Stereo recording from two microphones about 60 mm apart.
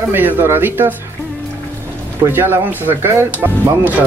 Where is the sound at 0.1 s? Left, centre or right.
Right.